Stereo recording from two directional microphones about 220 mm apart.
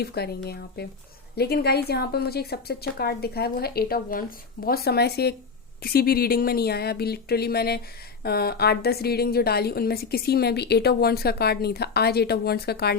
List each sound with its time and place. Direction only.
0.0 s a woman's voice: 45° left (ahead or behind)